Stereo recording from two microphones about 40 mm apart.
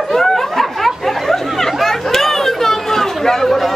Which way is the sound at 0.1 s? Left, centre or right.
Centre.